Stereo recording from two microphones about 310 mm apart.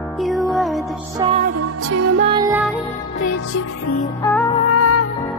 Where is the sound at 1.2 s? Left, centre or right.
Right.